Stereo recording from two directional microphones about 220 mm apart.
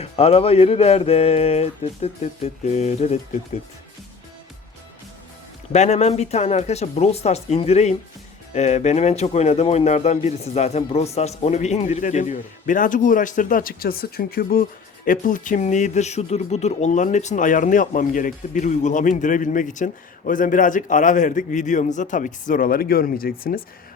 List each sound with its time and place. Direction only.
0.0 s speech: 25° left (ahead or behind)
5.7 s a man's voice: 30° left (ahead or behind)